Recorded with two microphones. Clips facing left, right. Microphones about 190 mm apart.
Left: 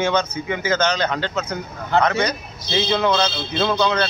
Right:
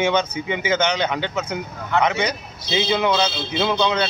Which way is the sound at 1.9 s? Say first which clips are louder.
Left 1 dB; 35° left (ahead or behind).